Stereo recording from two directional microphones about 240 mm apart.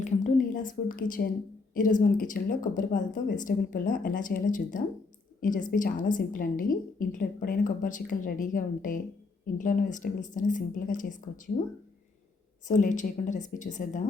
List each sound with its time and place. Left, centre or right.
0.0 s a woman's voice: left
12.6 s a woman's voice: left